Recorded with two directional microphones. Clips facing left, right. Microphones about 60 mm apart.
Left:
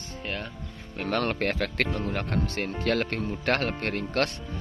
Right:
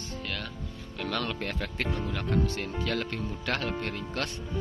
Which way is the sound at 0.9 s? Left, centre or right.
Left.